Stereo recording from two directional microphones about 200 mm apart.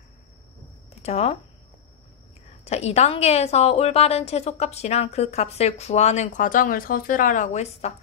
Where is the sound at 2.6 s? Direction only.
30° left (ahead or behind).